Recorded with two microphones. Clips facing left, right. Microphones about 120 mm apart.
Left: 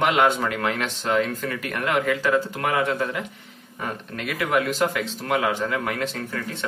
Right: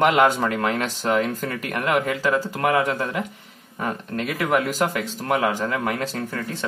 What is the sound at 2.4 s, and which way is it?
Speech, 35° right (ahead or behind).